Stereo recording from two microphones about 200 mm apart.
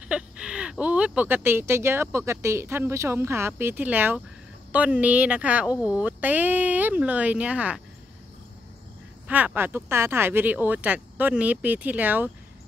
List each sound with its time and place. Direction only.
0.1 s speech: 5° right (ahead or behind)
5.7 s speech: 15° left (ahead or behind)
6.0 s speech: 10° right (ahead or behind)
9.3 s speech: 10° right (ahead or behind)